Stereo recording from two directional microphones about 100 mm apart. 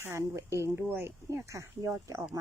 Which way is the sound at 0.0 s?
30° right (ahead or behind).